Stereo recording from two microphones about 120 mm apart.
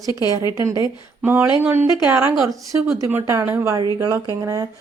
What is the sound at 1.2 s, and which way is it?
Speech, 20° right (ahead or behind).